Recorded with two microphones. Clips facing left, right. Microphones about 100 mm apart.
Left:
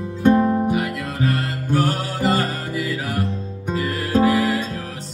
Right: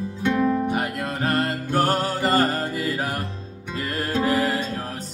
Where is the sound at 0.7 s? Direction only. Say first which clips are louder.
Left 2 dB; 50° right (ahead or behind).